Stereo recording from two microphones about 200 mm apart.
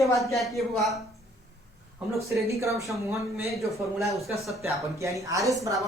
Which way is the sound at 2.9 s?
15° right (ahead or behind).